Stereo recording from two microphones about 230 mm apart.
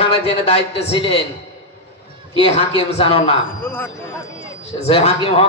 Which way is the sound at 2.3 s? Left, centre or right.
Left.